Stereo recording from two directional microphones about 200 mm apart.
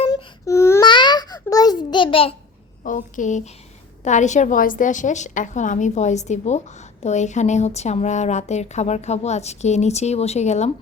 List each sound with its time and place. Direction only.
0.1 s baby cry: 15° left (ahead or behind)
2.8 s a woman's voice: 40° left (ahead or behind)